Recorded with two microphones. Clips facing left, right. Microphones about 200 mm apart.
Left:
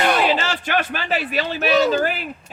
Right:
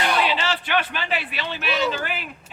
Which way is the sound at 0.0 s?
45° left (ahead or behind).